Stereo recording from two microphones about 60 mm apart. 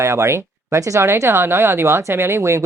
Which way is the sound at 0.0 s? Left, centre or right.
Right.